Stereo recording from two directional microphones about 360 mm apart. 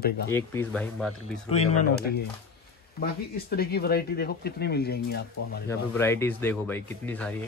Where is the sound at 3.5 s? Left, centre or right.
Left.